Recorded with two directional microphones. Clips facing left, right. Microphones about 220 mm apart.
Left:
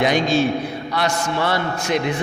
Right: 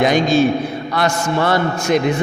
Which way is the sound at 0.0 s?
45° right (ahead or behind).